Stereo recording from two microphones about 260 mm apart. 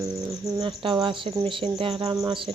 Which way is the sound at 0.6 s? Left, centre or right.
Centre.